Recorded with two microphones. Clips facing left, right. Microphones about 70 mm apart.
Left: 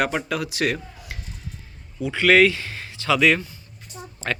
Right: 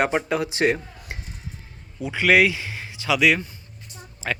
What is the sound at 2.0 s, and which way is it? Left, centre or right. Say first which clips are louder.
Speech: left 2 dB; centre.